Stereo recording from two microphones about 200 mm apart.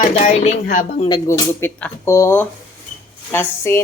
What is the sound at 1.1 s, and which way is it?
Speech, 10° left (ahead or behind).